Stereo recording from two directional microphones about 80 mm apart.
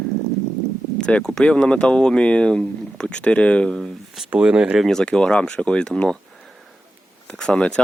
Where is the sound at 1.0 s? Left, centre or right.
Centre.